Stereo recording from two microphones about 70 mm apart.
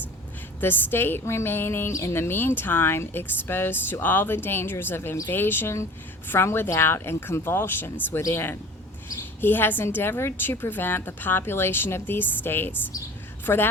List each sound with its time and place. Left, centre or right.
0.6 s a woman's voice: left
1.9 s a woman's voice: left